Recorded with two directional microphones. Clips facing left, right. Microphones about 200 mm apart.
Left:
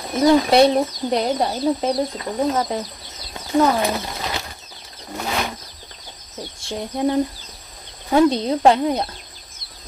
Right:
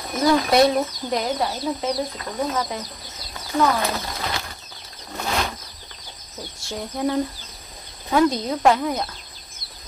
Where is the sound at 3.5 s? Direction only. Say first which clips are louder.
Left 4 dB; 30° left (ahead or behind).